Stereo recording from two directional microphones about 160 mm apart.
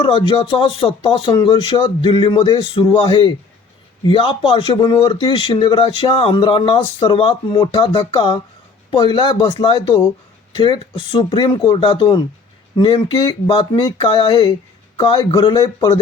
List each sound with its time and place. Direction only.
0.0 s speech: 35° left (ahead or behind)